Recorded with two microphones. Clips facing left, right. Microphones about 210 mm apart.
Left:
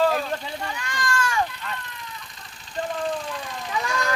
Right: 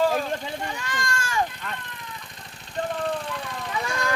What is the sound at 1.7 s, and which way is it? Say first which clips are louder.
Speech: left 1 dB; 50° right (ahead or behind).